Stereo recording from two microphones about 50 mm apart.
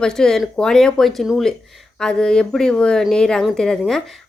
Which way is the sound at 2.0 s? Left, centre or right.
Centre.